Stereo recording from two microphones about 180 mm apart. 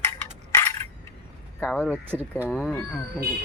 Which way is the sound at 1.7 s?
10° left (ahead or behind).